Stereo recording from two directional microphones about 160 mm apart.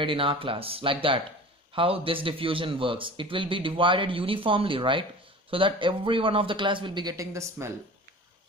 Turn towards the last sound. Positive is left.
turn(degrees=-15)  # may be behind; listen again after turning